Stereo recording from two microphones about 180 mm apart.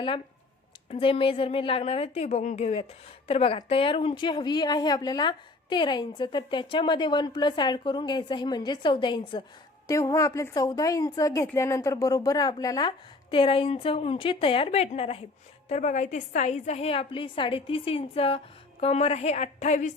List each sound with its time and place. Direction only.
0.9 s a woman's voice: 30° left (ahead or behind)